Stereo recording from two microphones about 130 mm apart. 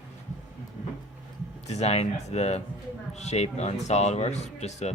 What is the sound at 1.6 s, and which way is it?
Speech, 60° left (ahead or behind).